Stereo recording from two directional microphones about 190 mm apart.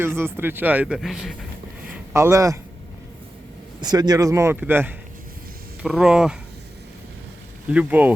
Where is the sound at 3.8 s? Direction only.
20° right (ahead or behind); by 6.3 s 5° right (ahead or behind).